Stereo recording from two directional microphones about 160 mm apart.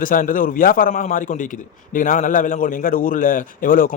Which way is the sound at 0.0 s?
60° left (ahead or behind).